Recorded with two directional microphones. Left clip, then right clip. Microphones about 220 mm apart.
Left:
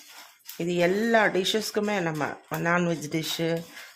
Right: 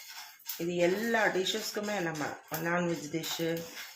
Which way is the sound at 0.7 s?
55° left (ahead or behind).